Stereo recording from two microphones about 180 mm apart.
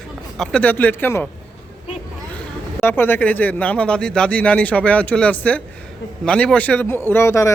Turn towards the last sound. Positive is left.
turn(degrees=15)  # may be behind; listen again after turning